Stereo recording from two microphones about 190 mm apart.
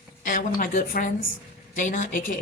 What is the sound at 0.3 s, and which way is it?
Speech, 45° left (ahead or behind).